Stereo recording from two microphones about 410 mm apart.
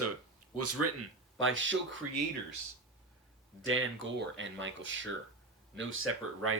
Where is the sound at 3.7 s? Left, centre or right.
Right.